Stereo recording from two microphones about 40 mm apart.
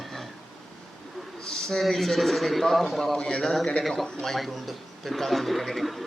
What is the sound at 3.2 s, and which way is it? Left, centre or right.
Speech, left.